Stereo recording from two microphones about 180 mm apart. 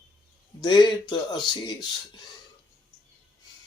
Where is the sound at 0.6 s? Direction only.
25° left (ahead or behind).